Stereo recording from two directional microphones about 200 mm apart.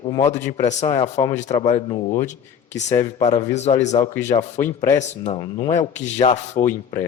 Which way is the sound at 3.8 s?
35° left (ahead or behind).